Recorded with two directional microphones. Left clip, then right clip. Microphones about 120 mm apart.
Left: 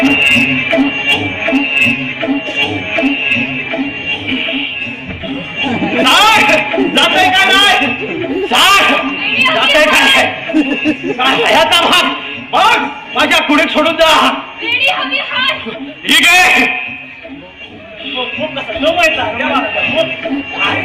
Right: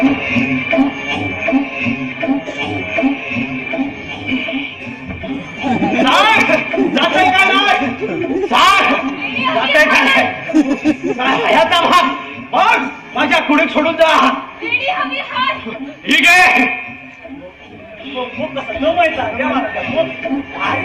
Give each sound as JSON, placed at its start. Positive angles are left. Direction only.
{"t": 0.0, "sound": "music", "side_deg": -40}
{"t": 5.5, "sound": "a sound", "side_deg": -35}
{"t": 11.2, "sound": "a man's voice", "side_deg": -35}
{"t": 12.5, "sound": "a sound", "side_deg": -40}
{"t": 16.0, "sound": "a man's voice", "side_deg": -35}
{"t": 18.2, "sound": "a man's voice", "side_deg": -40}